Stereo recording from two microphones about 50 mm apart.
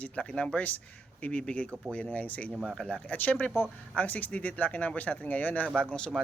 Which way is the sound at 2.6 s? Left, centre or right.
Centre.